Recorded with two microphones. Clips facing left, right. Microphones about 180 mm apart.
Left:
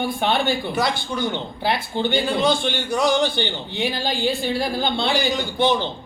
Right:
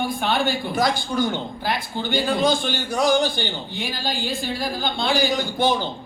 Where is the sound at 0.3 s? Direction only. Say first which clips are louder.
Left 2 dB; 45° right (ahead or behind).